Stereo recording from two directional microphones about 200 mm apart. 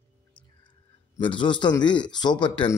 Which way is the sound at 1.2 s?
25° left (ahead or behind).